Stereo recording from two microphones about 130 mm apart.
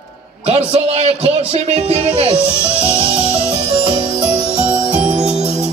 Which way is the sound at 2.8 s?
40° right (ahead or behind).